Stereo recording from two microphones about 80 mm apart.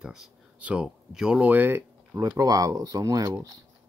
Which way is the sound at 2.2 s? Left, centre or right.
Right.